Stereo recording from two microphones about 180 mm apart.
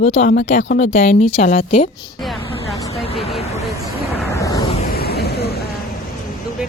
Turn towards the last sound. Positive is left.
turn(degrees=60)  # may be behind; listen again after turning